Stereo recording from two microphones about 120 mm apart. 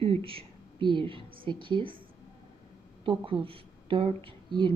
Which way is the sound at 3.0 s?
45° right (ahead or behind).